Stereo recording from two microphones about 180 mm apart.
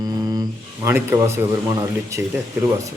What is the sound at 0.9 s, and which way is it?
Speech, 15° right (ahead or behind).